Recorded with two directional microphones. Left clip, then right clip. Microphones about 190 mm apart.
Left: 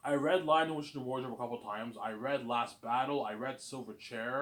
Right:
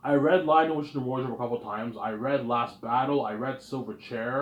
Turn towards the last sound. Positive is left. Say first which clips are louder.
# right 7 dB
turn(degrees=-5)  # may be behind; listen again after turning